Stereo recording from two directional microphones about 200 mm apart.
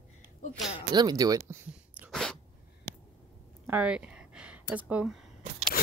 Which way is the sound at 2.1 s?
5° left (ahead or behind).